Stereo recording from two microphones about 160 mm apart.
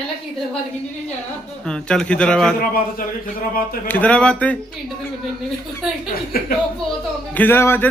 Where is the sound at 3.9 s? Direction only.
10° left (ahead or behind).